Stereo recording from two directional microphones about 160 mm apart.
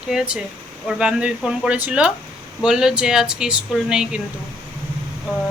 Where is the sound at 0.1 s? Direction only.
5° right (ahead or behind).